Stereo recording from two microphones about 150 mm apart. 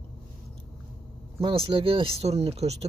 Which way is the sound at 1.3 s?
35° right (ahead or behind).